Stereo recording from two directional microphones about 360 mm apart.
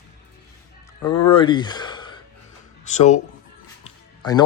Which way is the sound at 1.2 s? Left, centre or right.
Centre.